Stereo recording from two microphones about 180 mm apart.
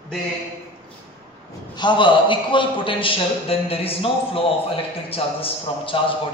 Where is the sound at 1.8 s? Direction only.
25° left (ahead or behind).